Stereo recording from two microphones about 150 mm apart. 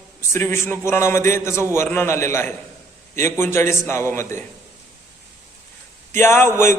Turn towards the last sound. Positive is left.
turn(degrees=15)  # may be behind; listen again after turning